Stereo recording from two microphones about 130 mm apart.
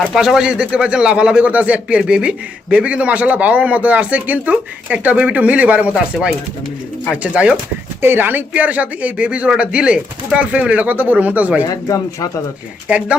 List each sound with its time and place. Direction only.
0.1 s speech: 5° right (ahead or behind)
11.6 s speech: 25° left (ahead or behind)
12.9 s speech: 10° right (ahead or behind)